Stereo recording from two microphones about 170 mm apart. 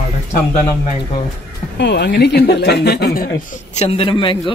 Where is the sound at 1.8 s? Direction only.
90° left; by 3.3 s 65° left (ahead or behind).